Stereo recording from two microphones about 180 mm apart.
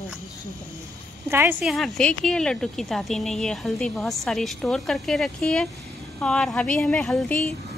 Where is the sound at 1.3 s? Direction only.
10° right (ahead or behind).